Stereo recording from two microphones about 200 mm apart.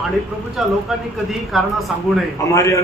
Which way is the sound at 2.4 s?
15° left (ahead or behind).